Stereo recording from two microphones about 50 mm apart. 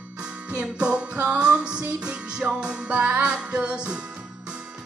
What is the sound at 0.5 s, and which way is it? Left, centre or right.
Music, right.